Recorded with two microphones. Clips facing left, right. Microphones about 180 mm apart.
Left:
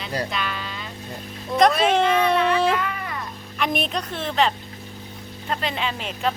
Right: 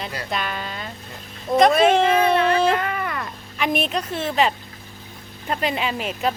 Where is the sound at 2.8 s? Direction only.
70° right (ahead or behind).